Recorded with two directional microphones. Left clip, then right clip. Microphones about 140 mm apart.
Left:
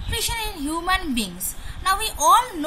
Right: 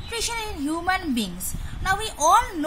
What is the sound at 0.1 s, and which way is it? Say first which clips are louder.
A woman's voice: left 2 dB; 35° right (ahead or behind).